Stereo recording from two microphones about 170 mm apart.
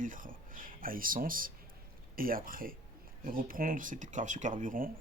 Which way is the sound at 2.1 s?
55° right (ahead or behind).